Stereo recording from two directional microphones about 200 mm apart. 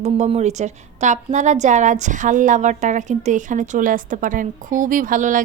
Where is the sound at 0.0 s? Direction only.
35° right (ahead or behind).